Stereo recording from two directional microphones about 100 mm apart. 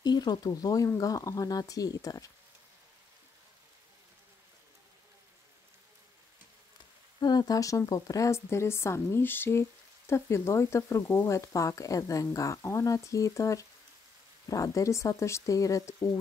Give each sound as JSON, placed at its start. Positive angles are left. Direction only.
{"t": 0.0, "sound": "speech", "side_deg": 45}
{"t": 7.2, "sound": "speech", "side_deg": 45}